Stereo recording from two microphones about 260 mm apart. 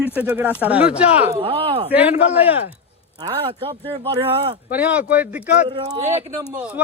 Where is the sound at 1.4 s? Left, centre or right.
Right.